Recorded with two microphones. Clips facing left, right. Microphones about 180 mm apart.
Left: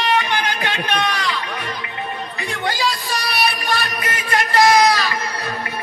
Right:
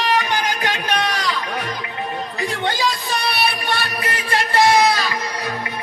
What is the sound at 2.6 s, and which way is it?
Music, 20° right (ahead or behind).